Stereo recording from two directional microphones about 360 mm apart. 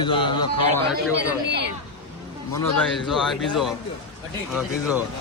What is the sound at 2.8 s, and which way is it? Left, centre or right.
Speech, centre.